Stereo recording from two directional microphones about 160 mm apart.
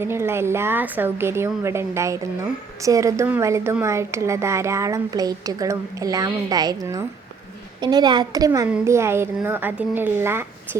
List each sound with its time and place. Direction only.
0.0 s a woman's voice: 15° right (ahead or behind)